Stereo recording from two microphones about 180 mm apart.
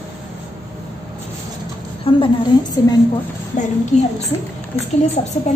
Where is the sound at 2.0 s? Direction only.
25° left (ahead or behind).